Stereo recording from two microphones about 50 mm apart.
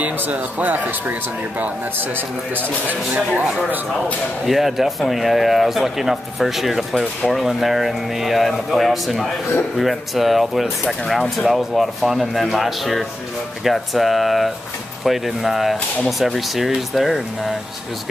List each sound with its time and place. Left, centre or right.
0.3 s speech: right
4.5 s speech: centre